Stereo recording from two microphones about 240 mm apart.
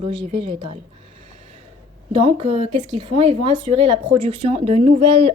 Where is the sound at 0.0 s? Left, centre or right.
Right.